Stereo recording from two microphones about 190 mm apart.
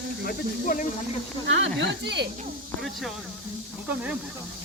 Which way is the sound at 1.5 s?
70° right (ahead or behind).